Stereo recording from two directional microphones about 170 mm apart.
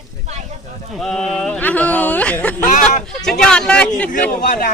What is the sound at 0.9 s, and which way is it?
Speech, centre (ahead or behind).